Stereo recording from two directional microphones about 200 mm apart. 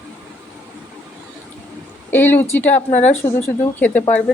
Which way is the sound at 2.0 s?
10° left (ahead or behind).